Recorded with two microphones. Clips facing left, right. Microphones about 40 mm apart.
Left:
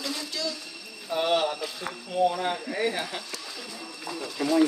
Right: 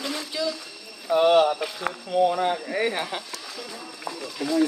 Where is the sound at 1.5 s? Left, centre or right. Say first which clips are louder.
Right 5 dB; right.